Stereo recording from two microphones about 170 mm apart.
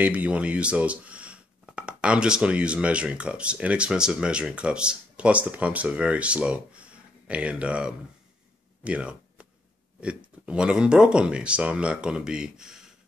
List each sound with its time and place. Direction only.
0.0 s speech: 10° right (ahead or behind)
8.8 s a sound: 5° right (ahead or behind)
9.9 s speech: 5° right (ahead or behind)